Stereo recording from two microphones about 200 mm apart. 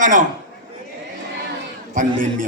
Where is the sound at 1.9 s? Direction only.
40° right (ahead or behind).